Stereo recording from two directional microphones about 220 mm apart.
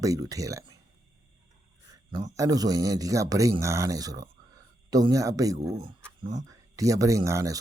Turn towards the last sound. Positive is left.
turn(degrees=-15)  # may be behind; listen again after turning